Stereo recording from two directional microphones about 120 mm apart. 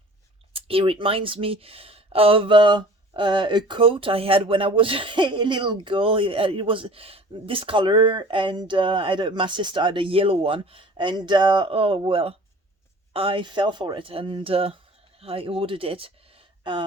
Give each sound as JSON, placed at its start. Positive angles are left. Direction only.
{"t": 0.5, "sound": "speech", "side_deg": -50}